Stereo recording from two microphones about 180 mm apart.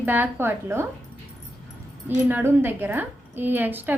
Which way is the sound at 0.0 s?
10° right (ahead or behind).